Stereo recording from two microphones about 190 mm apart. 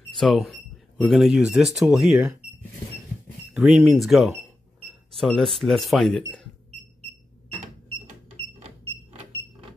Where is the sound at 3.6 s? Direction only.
Centre (ahead or behind).